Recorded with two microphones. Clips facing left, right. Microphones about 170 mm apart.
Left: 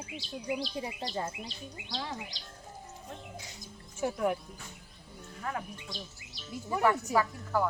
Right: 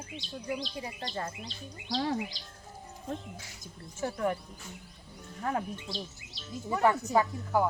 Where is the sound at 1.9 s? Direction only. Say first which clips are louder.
Right 8 dB; 45° right (ahead or behind).